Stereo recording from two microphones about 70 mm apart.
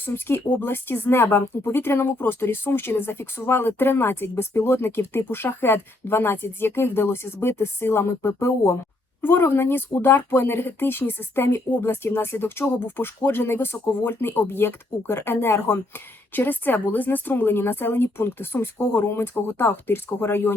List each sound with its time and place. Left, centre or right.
0.0 s speech: left
9.2 s speech: left